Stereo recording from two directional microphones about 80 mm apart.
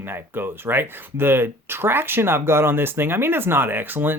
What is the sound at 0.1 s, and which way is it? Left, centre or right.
Speech, right.